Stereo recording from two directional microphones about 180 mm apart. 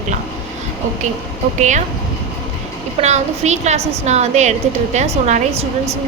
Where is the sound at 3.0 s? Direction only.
40° right (ahead or behind).